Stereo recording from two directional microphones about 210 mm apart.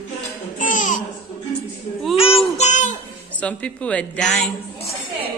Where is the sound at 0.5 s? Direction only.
35° left (ahead or behind).